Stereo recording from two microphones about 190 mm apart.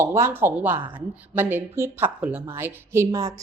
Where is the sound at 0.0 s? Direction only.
15° right (ahead or behind).